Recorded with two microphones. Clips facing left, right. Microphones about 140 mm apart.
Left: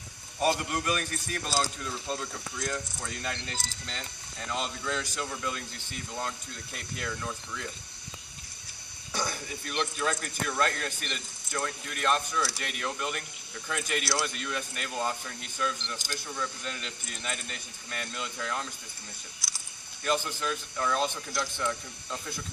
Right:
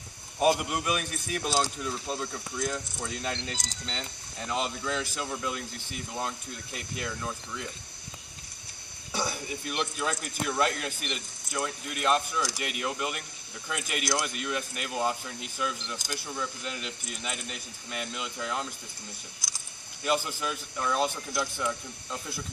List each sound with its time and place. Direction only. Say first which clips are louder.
0.3 s speech: right 3 dB; 15° right (ahead or behind)
6.7 s speech: right 1 dB; 10° right (ahead or behind)
9.1 s speech: right 2 dB; 10° right (ahead or behind)
20.1 s speech: right 1 dB; 10° right (ahead or behind)